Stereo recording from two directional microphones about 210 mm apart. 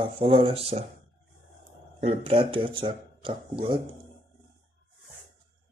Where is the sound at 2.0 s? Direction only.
25° right (ahead or behind).